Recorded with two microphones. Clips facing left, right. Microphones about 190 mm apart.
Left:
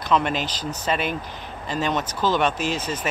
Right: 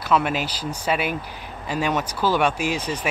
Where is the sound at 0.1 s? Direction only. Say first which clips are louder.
Right 1 dB; 10° right (ahead or behind).